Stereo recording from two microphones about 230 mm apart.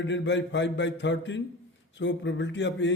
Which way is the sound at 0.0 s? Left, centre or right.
Left.